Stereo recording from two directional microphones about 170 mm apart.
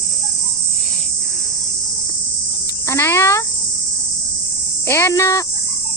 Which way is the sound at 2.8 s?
15° left (ahead or behind).